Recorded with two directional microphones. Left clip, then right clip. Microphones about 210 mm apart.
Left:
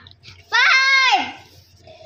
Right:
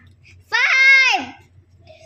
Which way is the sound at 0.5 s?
10° right (ahead or behind).